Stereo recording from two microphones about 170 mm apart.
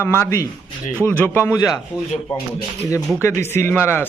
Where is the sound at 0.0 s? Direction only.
15° left (ahead or behind).